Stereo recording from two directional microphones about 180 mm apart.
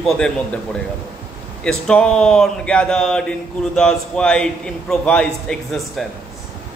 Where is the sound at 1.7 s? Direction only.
5° left (ahead or behind).